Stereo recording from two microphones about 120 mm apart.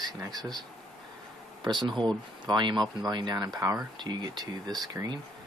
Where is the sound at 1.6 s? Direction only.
40° right (ahead or behind).